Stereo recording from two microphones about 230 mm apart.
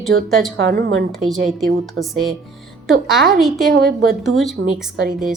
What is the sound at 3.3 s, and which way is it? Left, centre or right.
A woman's voice, centre.